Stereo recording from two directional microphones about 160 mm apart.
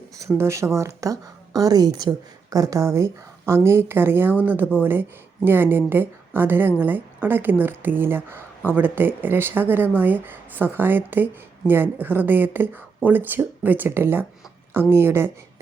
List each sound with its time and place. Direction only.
0.2 s a woman's voice: 15° right (ahead or behind)